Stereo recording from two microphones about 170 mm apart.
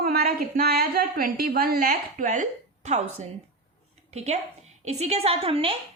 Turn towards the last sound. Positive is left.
turn(degrees=-35)  # may be behind; listen again after turning